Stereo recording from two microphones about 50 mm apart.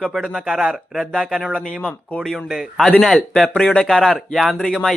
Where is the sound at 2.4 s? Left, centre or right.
Centre.